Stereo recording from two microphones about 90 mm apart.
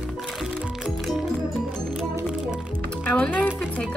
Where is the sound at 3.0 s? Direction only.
15° left (ahead or behind).